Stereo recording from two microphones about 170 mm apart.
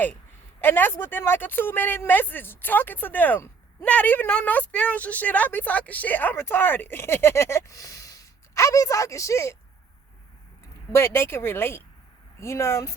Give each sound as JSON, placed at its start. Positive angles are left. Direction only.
{"t": 0.6, "sound": "speech", "side_deg": 10}
{"t": 10.9, "sound": "speech", "side_deg": 15}